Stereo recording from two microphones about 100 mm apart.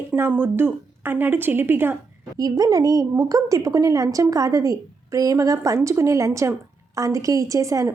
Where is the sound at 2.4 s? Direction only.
40° right (ahead or behind).